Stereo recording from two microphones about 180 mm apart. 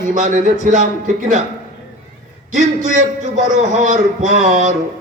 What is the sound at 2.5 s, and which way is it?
A man's voice, 45° right (ahead or behind).